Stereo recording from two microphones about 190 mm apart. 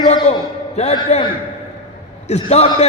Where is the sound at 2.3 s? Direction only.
35° left (ahead or behind).